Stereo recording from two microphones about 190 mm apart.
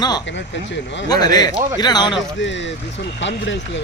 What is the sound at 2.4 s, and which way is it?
Speech, 70° left (ahead or behind).